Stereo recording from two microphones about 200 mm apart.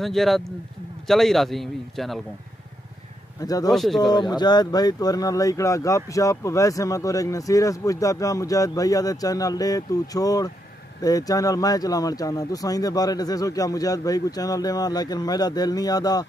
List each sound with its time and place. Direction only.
0.0 s a man's voice: centre (ahead or behind)
3.3 s speech: 20° left (ahead or behind)
3.7 s a man's voice: centre (ahead or behind)
4.1 s speech: 20° left (ahead or behind)